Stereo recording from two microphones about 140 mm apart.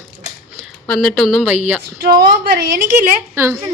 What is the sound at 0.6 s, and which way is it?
Speech, centre (ahead or behind).